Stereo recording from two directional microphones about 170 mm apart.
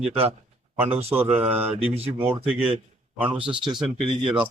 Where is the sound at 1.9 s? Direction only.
35° right (ahead or behind).